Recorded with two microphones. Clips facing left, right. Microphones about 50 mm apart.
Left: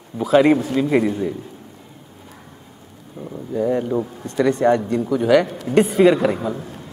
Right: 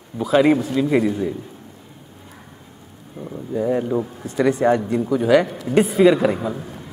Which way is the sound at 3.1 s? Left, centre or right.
Centre.